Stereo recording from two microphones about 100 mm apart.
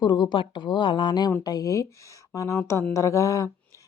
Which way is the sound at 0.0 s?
50° left (ahead or behind).